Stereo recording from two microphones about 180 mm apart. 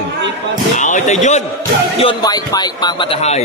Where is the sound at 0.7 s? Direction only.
45° left (ahead or behind).